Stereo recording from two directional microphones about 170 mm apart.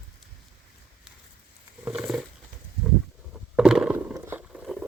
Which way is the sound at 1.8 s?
5° right (ahead or behind).